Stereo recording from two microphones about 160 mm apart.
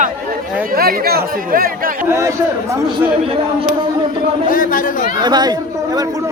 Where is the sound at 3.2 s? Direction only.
35° right (ahead or behind).